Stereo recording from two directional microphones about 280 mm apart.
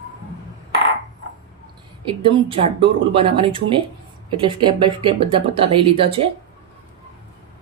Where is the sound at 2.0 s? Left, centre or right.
Centre.